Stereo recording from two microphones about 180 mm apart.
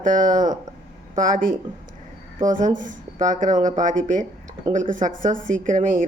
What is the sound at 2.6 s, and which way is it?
Speech, 45° right (ahead or behind).